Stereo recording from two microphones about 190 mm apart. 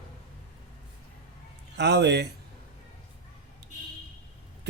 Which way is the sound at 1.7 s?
60° right (ahead or behind).